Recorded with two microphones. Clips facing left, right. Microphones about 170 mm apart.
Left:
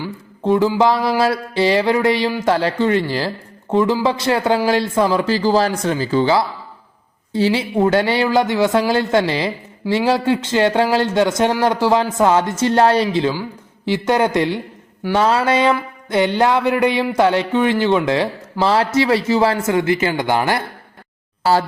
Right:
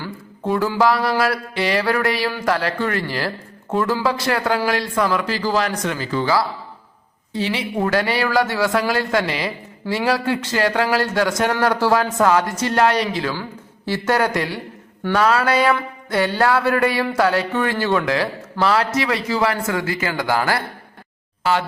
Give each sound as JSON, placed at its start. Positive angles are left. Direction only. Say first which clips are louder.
{"t": 0.0, "sound": "a sound", "louder": "left 4 dB", "side_deg": 20}
{"t": 1.2, "sound": "speech", "louder": "left 4 dB", "side_deg": 25}
{"t": 13.8, "sound": "speech", "louder": "left 3 dB", "side_deg": 15}